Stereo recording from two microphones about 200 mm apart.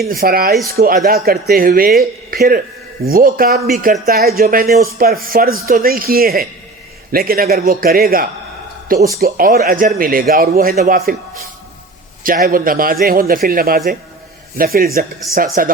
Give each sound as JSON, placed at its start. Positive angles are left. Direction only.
{"t": 0.1, "sound": "speech", "side_deg": -50}
{"t": 12.2, "sound": "speech", "side_deg": -45}